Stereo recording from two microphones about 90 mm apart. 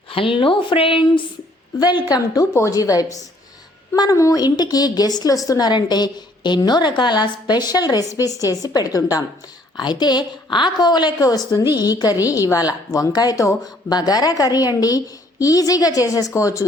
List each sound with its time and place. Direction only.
0.1 s speech: 85° left
1.8 s a woman's voice: 50° left (ahead or behind); by 16.6 s 35° left (ahead or behind)